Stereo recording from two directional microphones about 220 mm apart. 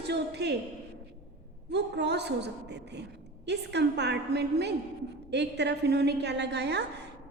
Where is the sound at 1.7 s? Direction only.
50° right (ahead or behind).